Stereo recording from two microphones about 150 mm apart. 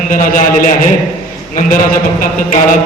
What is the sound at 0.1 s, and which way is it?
Speech, 60° left (ahead or behind).